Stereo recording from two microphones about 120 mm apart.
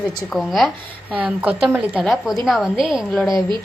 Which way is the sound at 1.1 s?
10° right (ahead or behind).